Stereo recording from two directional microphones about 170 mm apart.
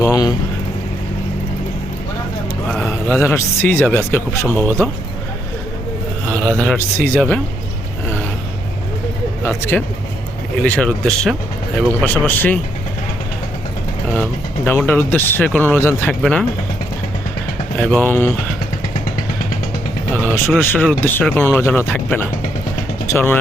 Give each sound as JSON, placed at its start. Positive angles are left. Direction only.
{"t": 0.0, "sound": "speech", "side_deg": 20}
{"t": 2.6, "sound": "mantra", "side_deg": 5}
{"t": 3.2, "sound": "speech", "side_deg": 15}
{"t": 6.6, "sound": "speech", "side_deg": 10}
{"t": 9.4, "sound": "speech", "side_deg": 15}
{"t": 14.2, "sound": "speech", "side_deg": 10}
{"t": 16.2, "sound": "speech", "side_deg": 5}
{"t": 17.7, "sound": "speech", "side_deg": 5}
{"t": 20.1, "sound": "vehicle", "side_deg": 10}
{"t": 20.6, "sound": "speech", "side_deg": 10}